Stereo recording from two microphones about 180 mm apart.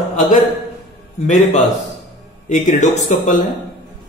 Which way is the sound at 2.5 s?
45° left (ahead or behind).